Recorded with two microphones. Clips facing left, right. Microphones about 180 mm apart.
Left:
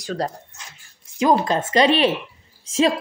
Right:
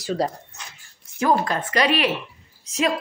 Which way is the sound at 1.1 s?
20° left (ahead or behind).